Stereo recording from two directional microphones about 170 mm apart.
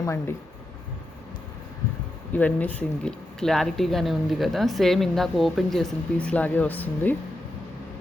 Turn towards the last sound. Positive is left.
turn(degrees=10)  # may be behind; listen again after turning